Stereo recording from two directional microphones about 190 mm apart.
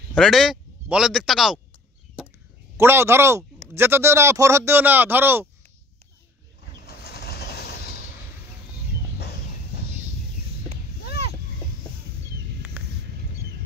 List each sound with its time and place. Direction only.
0.1 s speech: centre (ahead or behind)
2.8 s speech: 15° right (ahead or behind)
6.9 s vehicle: 55° left (ahead or behind)
10.7 s a sound: 60° left (ahead or behind)